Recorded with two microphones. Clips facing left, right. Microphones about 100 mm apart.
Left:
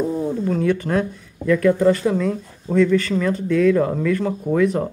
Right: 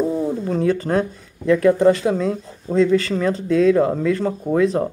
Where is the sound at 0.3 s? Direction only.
30° right (ahead or behind).